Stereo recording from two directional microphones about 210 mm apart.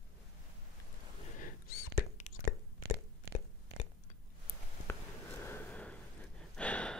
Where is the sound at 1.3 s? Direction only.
40° left (ahead or behind).